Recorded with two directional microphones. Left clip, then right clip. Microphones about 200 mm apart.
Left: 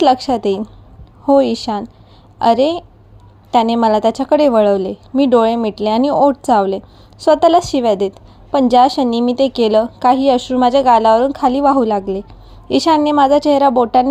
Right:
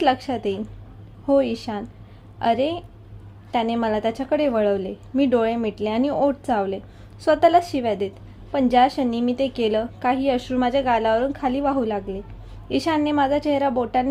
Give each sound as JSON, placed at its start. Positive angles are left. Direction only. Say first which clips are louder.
{"t": 0.0, "sound": "a woman's voice", "louder": "left 8 dB", "side_deg": 25}